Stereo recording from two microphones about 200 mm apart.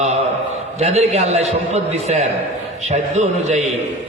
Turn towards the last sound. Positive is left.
turn(degrees=-35)  # may be behind; listen again after turning